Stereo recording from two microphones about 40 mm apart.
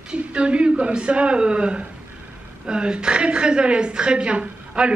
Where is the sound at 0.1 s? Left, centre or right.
Right.